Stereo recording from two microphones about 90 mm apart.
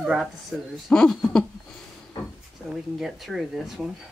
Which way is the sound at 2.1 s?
50° left (ahead or behind).